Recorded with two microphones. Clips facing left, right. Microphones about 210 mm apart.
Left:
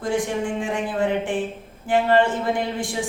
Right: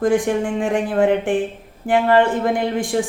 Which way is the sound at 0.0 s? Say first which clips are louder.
Right 6 dB; 55° right (ahead or behind).